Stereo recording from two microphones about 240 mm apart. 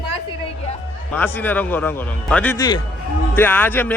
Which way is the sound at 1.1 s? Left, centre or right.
Centre.